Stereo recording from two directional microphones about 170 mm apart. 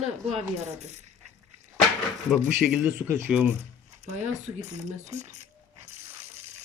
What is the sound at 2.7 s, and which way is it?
Speech, 10° right (ahead or behind).